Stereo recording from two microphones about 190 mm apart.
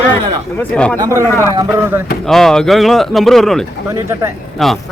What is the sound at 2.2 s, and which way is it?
Speech, centre (ahead or behind).